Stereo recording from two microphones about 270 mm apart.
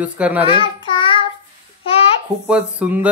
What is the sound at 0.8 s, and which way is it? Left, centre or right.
Child singing, centre.